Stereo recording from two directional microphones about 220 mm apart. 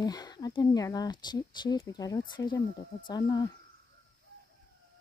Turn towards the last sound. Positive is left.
turn(degrees=20)  # may be behind; listen again after turning